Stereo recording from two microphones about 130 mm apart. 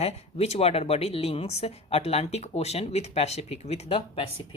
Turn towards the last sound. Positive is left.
turn(degrees=40)  # may be behind; listen again after turning